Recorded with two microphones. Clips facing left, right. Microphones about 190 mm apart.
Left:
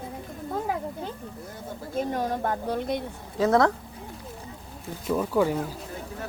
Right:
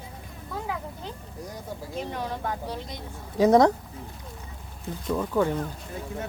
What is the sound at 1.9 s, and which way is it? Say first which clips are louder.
Speech: left 6 dB; 45° left (ahead or behind).